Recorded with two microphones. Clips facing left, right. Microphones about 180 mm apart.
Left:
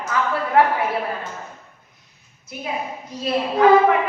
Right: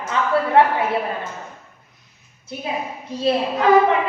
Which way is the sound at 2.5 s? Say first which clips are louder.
Right 1 dB; 30° right (ahead or behind).